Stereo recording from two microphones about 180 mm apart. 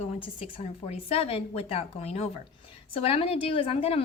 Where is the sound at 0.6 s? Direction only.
35° left (ahead or behind).